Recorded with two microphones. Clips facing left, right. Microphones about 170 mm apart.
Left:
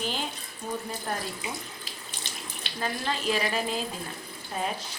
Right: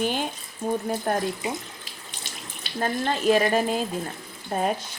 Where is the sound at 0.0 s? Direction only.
55° right (ahead or behind).